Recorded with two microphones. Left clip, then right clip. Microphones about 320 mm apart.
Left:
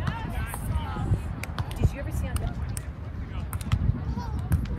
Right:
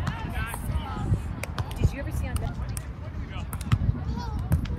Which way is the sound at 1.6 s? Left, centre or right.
Right.